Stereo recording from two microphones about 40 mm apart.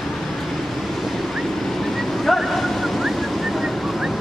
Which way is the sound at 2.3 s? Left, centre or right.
Centre.